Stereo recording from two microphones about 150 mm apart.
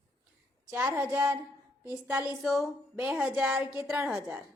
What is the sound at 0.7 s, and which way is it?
A woman's voice, 10° right (ahead or behind).